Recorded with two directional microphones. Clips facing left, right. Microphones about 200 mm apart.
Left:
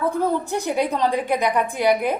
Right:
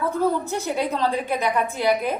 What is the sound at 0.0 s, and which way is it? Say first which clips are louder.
A woman's voice: left 1 dB; 15° left (ahead or behind).